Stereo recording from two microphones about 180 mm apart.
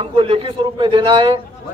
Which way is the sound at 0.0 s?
30° right (ahead or behind).